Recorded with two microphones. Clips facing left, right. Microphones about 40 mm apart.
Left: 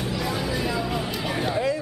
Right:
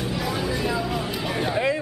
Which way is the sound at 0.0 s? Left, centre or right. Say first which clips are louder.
Right 1 dB; centre.